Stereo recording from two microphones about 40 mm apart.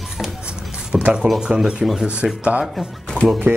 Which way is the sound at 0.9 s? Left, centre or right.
Centre.